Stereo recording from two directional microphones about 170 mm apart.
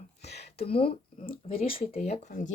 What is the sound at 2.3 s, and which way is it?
Speech, 50° left (ahead or behind).